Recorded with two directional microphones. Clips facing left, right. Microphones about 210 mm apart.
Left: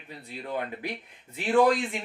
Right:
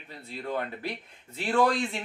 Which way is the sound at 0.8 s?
15° left (ahead or behind).